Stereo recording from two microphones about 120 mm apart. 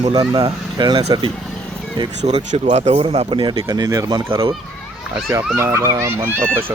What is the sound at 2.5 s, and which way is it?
A man's voice, 55° right (ahead or behind).